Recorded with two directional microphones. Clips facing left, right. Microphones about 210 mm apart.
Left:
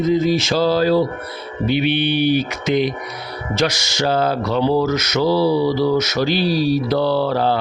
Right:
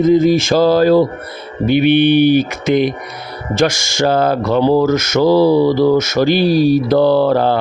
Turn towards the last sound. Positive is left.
turn(degrees=-50)  # may be behind; listen again after turning